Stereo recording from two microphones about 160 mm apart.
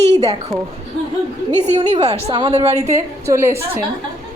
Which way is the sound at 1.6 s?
45° right (ahead or behind).